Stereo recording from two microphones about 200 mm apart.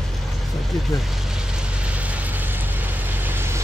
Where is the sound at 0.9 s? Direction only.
5° right (ahead or behind).